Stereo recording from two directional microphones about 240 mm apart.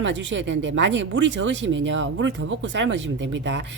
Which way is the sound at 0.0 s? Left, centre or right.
Right.